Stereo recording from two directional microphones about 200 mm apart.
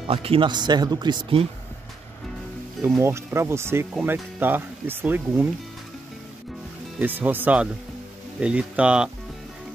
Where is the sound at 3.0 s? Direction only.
15° right (ahead or behind).